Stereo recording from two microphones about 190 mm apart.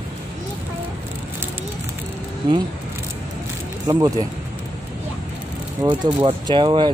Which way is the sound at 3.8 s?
20° right (ahead or behind).